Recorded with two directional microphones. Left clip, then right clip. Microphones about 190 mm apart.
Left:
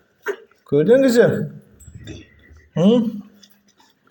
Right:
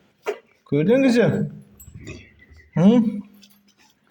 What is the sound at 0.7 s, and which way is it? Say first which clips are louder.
Speech: left 4 dB; 10° right (ahead or behind).